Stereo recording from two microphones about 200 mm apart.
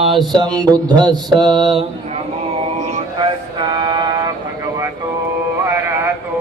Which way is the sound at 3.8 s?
20° right (ahead or behind).